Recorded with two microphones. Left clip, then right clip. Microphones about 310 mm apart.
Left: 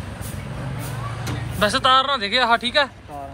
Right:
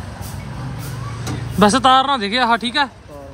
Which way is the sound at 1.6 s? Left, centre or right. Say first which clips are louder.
Right 4 dB; right.